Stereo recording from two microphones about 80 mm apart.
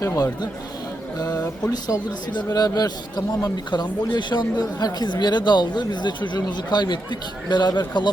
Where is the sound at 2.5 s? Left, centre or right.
Left.